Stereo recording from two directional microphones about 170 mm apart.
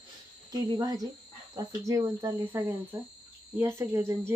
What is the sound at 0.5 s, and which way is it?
Speech, 25° right (ahead or behind).